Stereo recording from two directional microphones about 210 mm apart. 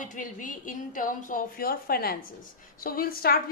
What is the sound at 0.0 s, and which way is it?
A woman's voice, 40° left (ahead or behind).